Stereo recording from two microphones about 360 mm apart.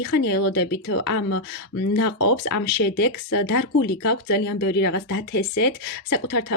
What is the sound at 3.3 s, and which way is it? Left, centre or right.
Speech, left.